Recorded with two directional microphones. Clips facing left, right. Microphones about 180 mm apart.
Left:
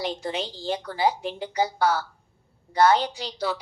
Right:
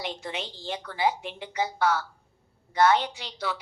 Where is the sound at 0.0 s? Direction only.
35° left (ahead or behind).